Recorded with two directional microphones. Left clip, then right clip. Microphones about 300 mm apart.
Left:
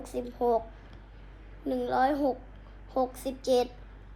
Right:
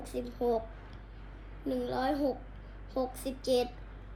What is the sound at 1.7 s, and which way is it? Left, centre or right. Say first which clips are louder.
Speech: left 3 dB; centre.